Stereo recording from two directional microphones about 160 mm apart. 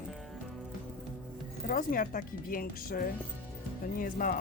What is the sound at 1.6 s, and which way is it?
Speech, 60° left (ahead or behind).